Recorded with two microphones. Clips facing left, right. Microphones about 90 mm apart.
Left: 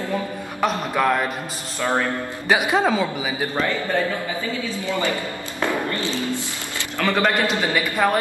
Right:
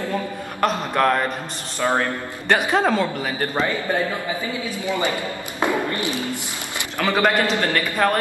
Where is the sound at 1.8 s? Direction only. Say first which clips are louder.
Right 1 dB; 15° right (ahead or behind).